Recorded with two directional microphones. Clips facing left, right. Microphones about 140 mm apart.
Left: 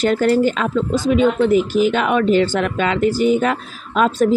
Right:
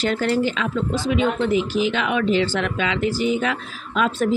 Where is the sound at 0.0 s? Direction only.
45° left (ahead or behind).